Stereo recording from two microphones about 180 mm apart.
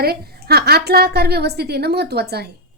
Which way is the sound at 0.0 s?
60° right (ahead or behind).